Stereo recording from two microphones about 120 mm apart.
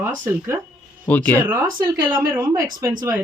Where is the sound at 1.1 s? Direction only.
15° left (ahead or behind).